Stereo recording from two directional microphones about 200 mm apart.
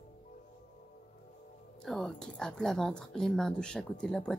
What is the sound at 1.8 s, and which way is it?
Speech, centre (ahead or behind).